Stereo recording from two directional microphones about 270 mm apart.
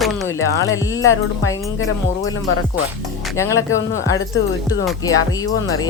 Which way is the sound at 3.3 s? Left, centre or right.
Centre.